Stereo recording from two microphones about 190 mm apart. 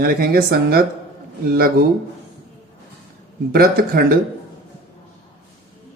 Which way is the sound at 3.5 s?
50° right (ahead or behind).